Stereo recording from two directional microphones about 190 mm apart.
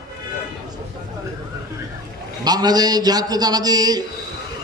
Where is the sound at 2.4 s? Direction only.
20° right (ahead or behind).